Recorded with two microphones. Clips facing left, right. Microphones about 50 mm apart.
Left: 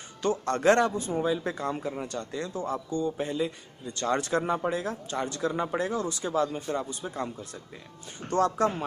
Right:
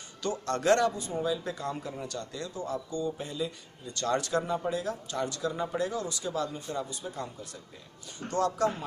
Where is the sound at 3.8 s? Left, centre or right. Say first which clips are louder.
Left 2 dB; left.